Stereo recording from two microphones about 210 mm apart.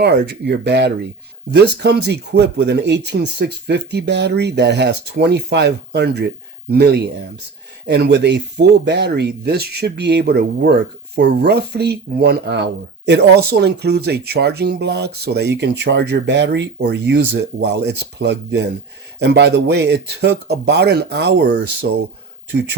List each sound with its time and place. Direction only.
0.0 s speech: 50° right (ahead or behind)